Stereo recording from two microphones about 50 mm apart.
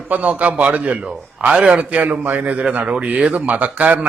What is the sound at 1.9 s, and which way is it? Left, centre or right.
A man's voice, right.